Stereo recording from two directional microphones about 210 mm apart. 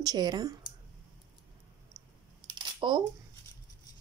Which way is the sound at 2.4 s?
25° right (ahead or behind).